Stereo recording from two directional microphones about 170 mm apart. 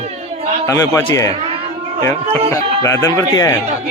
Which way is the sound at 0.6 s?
20° left (ahead or behind).